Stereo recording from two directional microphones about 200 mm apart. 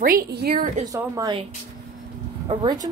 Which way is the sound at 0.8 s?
15° right (ahead or behind).